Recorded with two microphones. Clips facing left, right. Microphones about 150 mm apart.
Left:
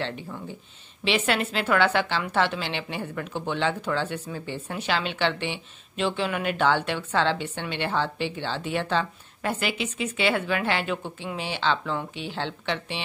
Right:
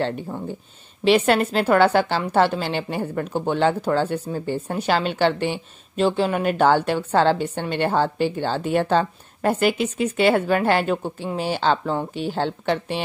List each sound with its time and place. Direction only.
0.0 s a woman's voice: 45° right (ahead or behind)